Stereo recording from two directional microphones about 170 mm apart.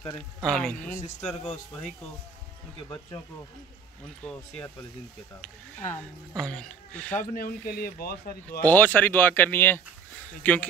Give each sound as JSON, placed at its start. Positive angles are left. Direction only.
{"t": 0.4, "sound": "speech", "side_deg": 5}
{"t": 5.4, "sound": "speech", "side_deg": 10}
{"t": 7.3, "sound": "speech", "side_deg": 60}
{"t": 8.5, "sound": "speech", "side_deg": 10}